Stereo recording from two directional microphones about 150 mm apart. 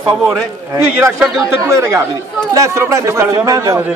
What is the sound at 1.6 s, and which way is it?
A man's voice, 20° right (ahead or behind).